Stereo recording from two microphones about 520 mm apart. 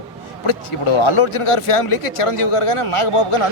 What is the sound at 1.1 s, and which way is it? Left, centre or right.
Speech, left.